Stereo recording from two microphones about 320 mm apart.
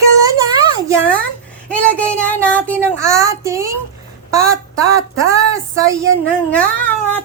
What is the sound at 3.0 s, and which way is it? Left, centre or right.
A woman's voice, centre.